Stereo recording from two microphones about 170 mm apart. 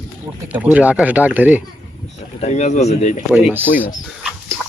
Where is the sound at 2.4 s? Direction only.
40° left (ahead or behind).